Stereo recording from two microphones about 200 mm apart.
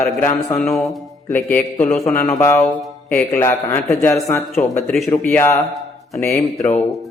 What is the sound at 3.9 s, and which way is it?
A man's voice, centre (ahead or behind).